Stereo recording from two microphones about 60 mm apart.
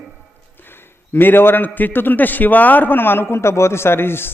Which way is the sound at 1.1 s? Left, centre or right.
Left.